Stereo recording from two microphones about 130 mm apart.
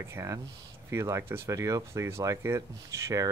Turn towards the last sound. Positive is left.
turn(degrees=-25)  # may be behind; listen again after turning